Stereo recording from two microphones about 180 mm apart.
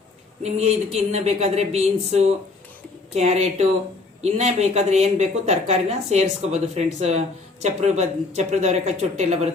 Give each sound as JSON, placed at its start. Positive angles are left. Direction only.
{"t": 0.4, "sound": "speech", "side_deg": -35}